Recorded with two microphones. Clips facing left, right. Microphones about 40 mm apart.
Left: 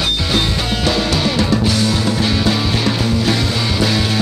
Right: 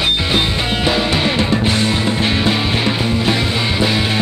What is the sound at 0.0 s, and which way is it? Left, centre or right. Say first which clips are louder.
Music: right 1 dB; right.